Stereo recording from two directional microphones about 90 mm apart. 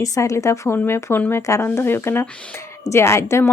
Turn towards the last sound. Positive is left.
turn(degrees=30)  # may be behind; listen again after turning